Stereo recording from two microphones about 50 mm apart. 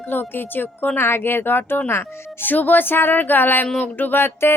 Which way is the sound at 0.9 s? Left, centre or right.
Left.